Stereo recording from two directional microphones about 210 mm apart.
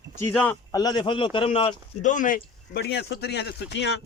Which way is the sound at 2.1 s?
40° left (ahead or behind).